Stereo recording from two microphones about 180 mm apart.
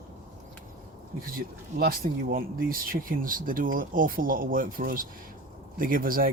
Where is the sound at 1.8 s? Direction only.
55° right (ahead or behind).